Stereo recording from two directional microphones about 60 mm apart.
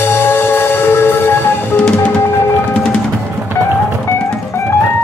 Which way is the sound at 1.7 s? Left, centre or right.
Left.